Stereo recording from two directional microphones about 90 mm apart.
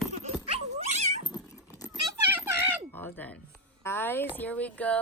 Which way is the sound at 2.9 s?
20° left (ahead or behind).